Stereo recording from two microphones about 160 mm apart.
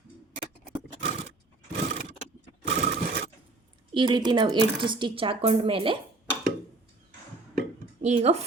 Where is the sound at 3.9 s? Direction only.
30° right (ahead or behind).